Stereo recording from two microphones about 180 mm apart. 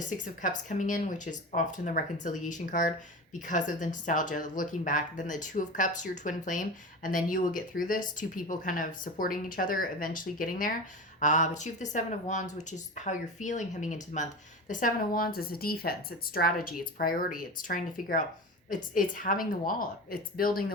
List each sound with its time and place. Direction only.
0.4 s speech: 45° left (ahead or behind)